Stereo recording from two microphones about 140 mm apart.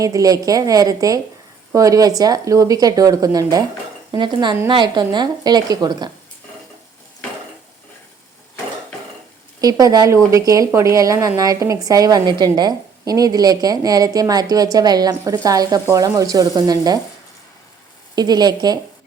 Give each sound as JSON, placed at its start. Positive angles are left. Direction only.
{"t": 0.0, "sound": "speech", "side_deg": -25}
{"t": 9.6, "sound": "speech", "side_deg": -25}
{"t": 18.1, "sound": "speech", "side_deg": -30}